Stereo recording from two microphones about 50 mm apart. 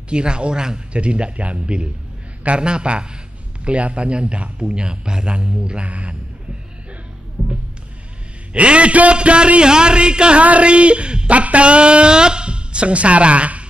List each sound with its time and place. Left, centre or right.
0.1 s a man's voice: centre
7.4 s music: right
8.5 s a man's voice: right